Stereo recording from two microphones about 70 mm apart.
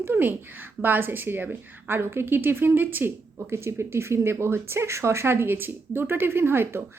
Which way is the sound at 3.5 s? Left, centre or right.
Right.